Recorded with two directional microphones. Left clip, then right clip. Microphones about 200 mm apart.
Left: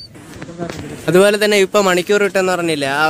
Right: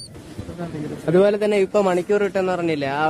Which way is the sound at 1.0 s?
5° left (ahead or behind).